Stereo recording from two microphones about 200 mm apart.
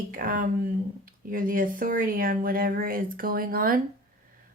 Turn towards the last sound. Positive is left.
turn(degrees=-45)  # may be behind; listen again after turning